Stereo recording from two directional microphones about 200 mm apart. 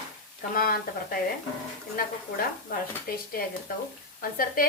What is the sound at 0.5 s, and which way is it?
Speech, 45° left (ahead or behind).